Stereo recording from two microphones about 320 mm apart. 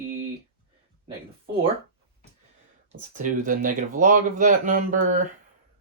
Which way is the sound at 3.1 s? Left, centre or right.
Right.